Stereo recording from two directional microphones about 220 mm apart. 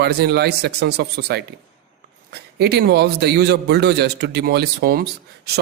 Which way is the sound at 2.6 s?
50° right (ahead or behind).